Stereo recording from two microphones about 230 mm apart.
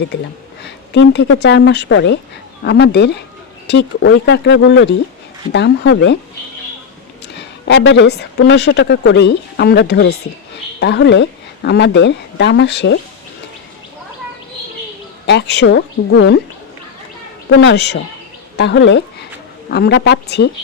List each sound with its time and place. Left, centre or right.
0.6 s speech: left
7.3 s speech: left
15.3 s speech: left
17.5 s a woman's voice: left